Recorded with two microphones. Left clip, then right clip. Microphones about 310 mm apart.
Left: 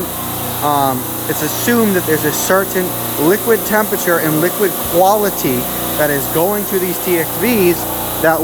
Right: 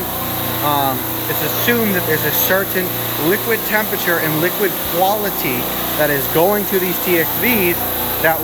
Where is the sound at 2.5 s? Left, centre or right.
Centre.